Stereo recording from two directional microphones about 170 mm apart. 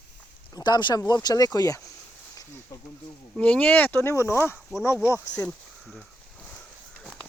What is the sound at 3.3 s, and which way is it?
Speech, 5° left (ahead or behind).